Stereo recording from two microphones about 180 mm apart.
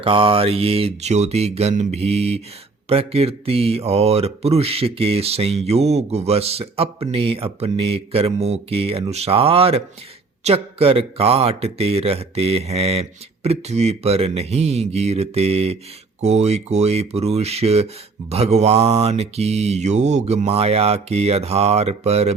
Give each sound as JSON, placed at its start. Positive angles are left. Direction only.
{"t": 0.0, "sound": "speech", "side_deg": -30}